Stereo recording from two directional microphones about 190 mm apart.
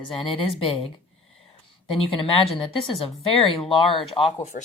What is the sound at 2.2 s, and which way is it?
Speech, 30° left (ahead or behind).